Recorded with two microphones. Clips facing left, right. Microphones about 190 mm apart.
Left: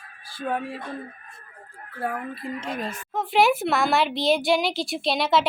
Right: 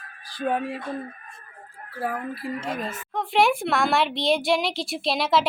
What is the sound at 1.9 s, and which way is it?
A woman's voice, 5° right (ahead or behind).